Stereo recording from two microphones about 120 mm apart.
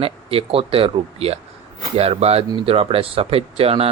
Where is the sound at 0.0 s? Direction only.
50° right (ahead or behind).